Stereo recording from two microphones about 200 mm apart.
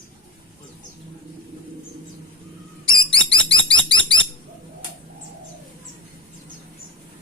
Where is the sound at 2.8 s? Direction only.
25° left (ahead or behind).